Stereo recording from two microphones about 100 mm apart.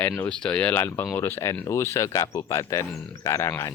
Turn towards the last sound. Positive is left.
turn(degrees=30)  # may be behind; listen again after turning